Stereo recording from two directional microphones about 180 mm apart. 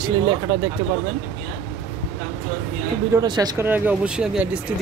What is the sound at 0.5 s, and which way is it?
Speech, 20° right (ahead or behind).